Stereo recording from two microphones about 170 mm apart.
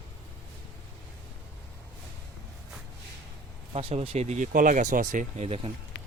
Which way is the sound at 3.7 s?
35° right (ahead or behind).